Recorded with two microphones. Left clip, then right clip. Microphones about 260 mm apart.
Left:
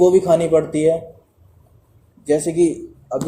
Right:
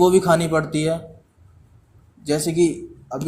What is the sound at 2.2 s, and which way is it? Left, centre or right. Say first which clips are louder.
Speech: left 3 dB; right.